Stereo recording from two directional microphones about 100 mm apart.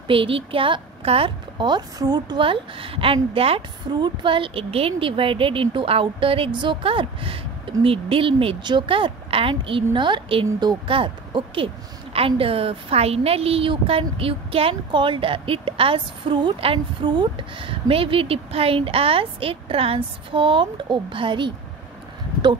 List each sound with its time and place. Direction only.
0.1 s a woman's voice: 65° right (ahead or behind)
1.0 s a woman's voice: 70° right (ahead or behind)
1.6 s a woman's voice: 45° right (ahead or behind)
2.4 s a woman's voice: 65° right (ahead or behind)
3.9 s a woman's voice: 50° right (ahead or behind)
10.9 s a woman's voice: 60° right (ahead or behind)
14.9 s a woman's voice: 55° right (ahead or behind)